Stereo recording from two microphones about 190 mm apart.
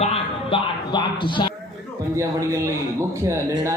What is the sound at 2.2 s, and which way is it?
A man's voice, 15° right (ahead or behind).